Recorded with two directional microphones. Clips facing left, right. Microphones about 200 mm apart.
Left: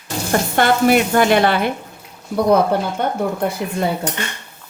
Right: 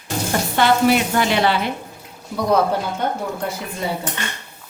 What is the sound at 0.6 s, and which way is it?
Speech, 50° left (ahead or behind).